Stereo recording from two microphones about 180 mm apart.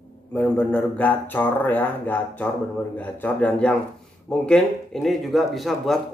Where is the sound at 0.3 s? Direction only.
5° left (ahead or behind).